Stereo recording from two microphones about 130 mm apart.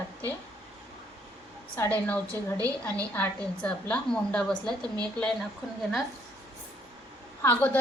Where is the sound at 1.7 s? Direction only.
15° left (ahead or behind).